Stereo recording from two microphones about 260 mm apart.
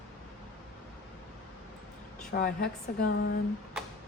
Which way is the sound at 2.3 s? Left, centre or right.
Left.